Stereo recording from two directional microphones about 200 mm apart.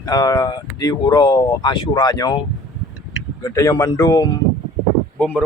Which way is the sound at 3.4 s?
15° left (ahead or behind).